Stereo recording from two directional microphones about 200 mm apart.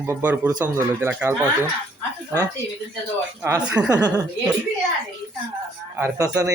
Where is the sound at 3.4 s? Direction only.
10° right (ahead or behind).